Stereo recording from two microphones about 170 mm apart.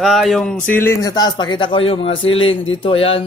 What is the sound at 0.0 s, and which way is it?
A man's voice, centre (ahead or behind).